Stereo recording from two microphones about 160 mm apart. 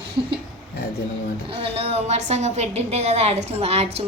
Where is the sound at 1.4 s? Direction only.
35° right (ahead or behind).